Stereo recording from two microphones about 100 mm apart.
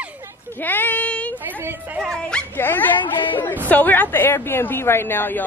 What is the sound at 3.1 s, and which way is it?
Speech, 55° left (ahead or behind).